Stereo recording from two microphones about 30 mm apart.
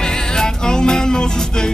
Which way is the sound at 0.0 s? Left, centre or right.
Left.